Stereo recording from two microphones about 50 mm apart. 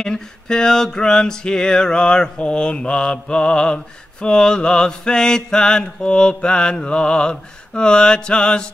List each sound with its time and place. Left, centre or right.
0.0 s mantra: centre